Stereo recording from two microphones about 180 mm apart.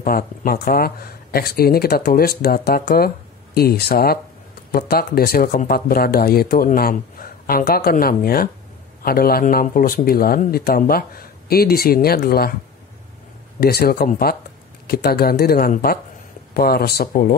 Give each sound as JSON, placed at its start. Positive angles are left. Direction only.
{"t": 0.0, "sound": "speech", "side_deg": 55}
{"t": 13.6, "sound": "speech", "side_deg": 60}